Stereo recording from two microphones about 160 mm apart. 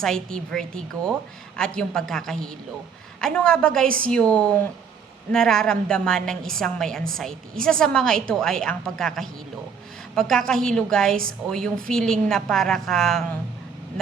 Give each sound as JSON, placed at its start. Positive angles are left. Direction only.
{"t": 0.0, "sound": "a woman's voice", "side_deg": 5}
{"t": 3.8, "sound": "a woman's voice", "side_deg": -60}
{"t": 4.1, "sound": "a woman's voice", "side_deg": 5}